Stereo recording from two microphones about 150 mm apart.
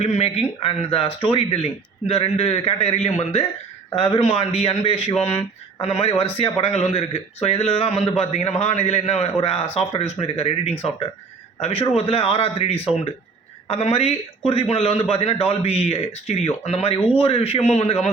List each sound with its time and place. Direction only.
0.0 s a man's voice: 45° left (ahead or behind)